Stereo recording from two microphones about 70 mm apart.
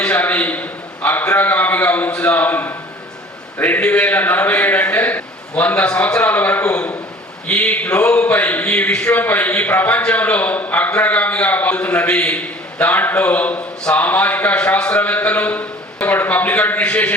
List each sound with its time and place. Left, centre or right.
0.0 s a man's voice: centre
9.1 s a man's voice: left